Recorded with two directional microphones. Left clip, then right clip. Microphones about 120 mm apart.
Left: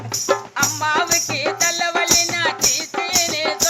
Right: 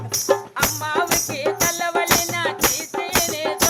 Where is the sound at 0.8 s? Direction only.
15° right (ahead or behind).